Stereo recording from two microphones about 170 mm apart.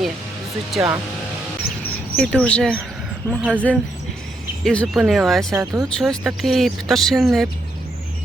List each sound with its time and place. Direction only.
0.8 s speech: 5° right (ahead or behind)
1.8 s a sound: 5° left (ahead or behind)
3.2 s speech: 10° right (ahead or behind)
4.6 s speech: 5° left (ahead or behind)
5.5 s speech: 20° right (ahead or behind)
6.0 s speech: centre (ahead or behind)